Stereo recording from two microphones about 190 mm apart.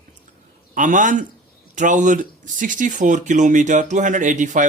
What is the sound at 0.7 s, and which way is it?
A man's voice, 45° right (ahead or behind).